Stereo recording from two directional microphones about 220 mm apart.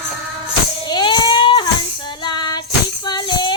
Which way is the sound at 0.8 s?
20° left (ahead or behind).